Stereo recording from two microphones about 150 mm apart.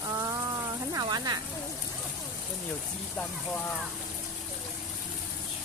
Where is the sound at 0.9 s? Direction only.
25° right (ahead or behind).